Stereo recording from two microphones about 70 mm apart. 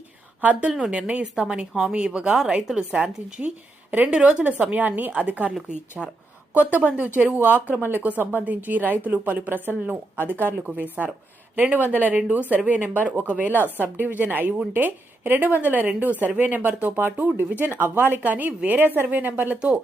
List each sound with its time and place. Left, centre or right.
0.7 s a woman's voice: centre
6.0 s a woman's voice: centre
6.5 s a woman's voice: right
13.0 s speech: left
13.2 s a woman's voice: right
13.5 s speech: left
13.8 s a woman's voice: right